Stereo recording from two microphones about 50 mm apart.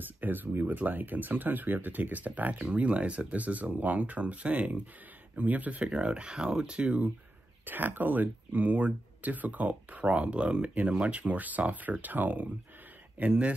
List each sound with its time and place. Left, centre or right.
0.0 s speech: right
2.6 s speech: right
7.6 s speech: right
13.3 s speech: right